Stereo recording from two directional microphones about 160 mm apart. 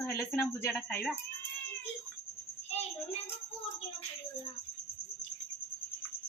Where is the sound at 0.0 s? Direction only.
15° left (ahead or behind).